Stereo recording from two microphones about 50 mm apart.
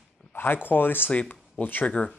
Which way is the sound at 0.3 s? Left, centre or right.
Left.